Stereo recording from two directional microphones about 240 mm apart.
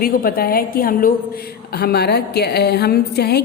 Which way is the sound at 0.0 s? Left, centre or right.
Left.